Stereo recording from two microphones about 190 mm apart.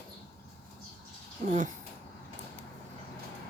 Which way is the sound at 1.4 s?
40° right (ahead or behind).